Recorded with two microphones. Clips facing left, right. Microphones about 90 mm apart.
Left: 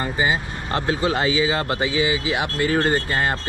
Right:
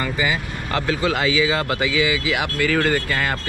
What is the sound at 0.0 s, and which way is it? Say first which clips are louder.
Speech: left 1 dB; 30° left (ahead or behind).